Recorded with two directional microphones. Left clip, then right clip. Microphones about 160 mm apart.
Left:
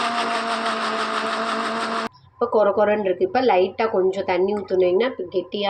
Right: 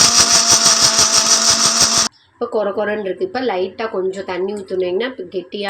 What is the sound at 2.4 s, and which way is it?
A woman's voice, 10° right (ahead or behind).